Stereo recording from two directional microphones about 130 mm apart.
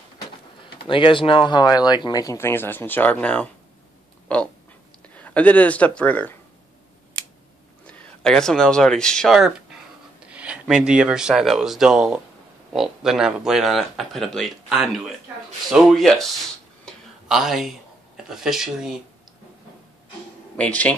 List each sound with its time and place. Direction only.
0.8 s speech: 40° left (ahead or behind); by 3.4 s 10° left (ahead or behind)
4.3 s a sound: 10° left (ahead or behind)
5.0 s speech: 10° left (ahead or behind)
7.8 s speech: 5° left (ahead or behind)
16.8 s a sound: centre (ahead or behind)
20.5 s speech: 10° left (ahead or behind)